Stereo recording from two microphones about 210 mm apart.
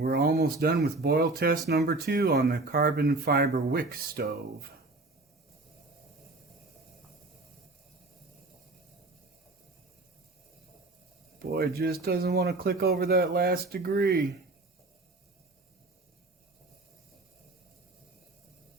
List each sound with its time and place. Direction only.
0.0 s speech: 45° right (ahead or behind)
11.5 s speech: 50° right (ahead or behind)